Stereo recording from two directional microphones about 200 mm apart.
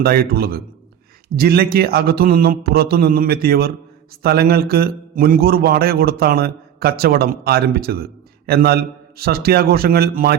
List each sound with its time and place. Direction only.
0.0 s a man's voice: 50° right (ahead or behind)